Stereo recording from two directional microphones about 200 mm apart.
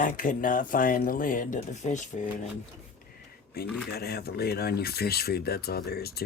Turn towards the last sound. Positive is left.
turn(degrees=50)  # may be behind; listen again after turning